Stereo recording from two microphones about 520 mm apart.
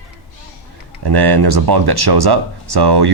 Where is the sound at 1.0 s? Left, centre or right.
Right.